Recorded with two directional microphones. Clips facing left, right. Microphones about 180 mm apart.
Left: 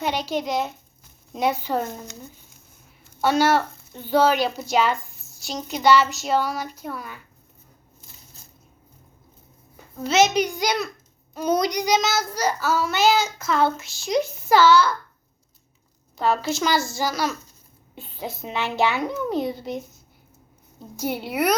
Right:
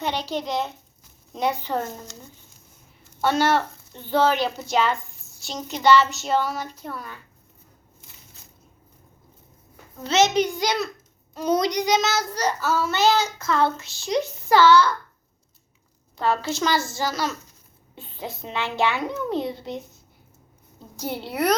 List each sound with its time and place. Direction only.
0.0 s a child's voice: 10° left (ahead or behind)
1.3 s child singing: 5° left (ahead or behind)
3.2 s a woman's voice: 5° left (ahead or behind)
4.7 s child singing: centre (ahead or behind)
6.8 s a child's voice: 5° left (ahead or behind)
9.9 s child singing: 5° left (ahead or behind)
16.1 s a child's voice: 10° left (ahead or behind)
21.0 s a child's voice: 15° left (ahead or behind)